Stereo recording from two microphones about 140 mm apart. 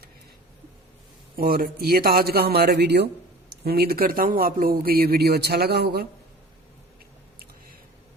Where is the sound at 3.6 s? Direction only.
90° right.